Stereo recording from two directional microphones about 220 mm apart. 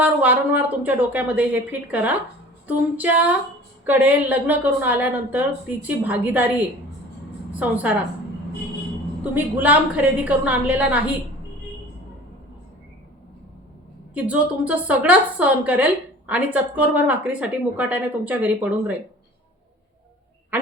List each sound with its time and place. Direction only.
0.0 s a woman's voice: 5° right (ahead or behind)
7.5 s a woman's voice: 5° right (ahead or behind)
9.3 s a woman's voice: 10° right (ahead or behind)
14.1 s a woman's voice: 5° right (ahead or behind)